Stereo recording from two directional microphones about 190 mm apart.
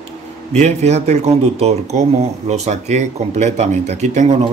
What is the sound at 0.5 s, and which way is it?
Speech, 35° right (ahead or behind).